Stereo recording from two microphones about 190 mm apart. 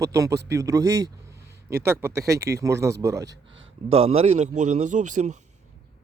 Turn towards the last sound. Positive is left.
turn(degrees=-40)  # may be behind; listen again after turning